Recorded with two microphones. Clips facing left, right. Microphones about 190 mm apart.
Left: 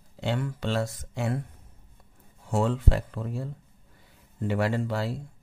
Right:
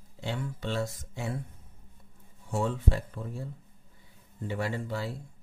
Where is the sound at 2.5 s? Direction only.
90° left.